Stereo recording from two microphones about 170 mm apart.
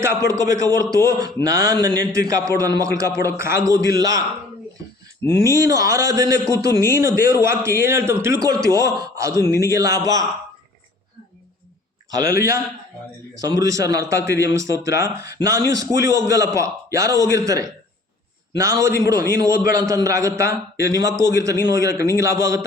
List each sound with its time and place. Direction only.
0.0 s a man's voice: 15° right (ahead or behind)
5.4 s a man's voice: 20° right (ahead or behind)
13.4 s a man's voice: 20° right (ahead or behind)